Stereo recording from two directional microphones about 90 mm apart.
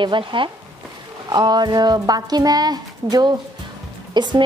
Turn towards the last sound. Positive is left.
turn(degrees=-55)  # may be behind; listen again after turning